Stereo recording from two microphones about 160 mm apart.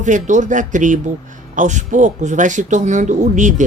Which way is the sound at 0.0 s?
50° right (ahead or behind).